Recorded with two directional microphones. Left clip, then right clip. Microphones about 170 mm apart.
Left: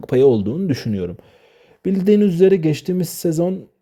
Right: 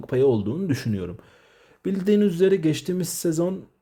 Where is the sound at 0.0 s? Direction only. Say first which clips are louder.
Left 6 dB; 45° left (ahead or behind).